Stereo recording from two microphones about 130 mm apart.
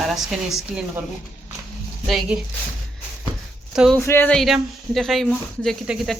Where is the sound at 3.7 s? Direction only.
5° right (ahead or behind).